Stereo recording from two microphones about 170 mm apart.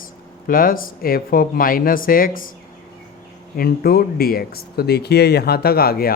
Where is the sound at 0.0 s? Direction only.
55° left (ahead or behind).